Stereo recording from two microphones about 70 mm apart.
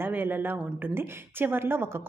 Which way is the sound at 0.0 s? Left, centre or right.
Right.